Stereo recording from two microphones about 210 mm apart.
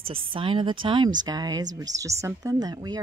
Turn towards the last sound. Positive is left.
turn(degrees=-20)  # may be behind; listen again after turning